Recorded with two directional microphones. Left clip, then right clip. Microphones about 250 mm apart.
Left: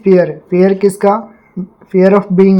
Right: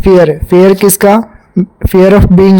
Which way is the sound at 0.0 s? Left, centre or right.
Right.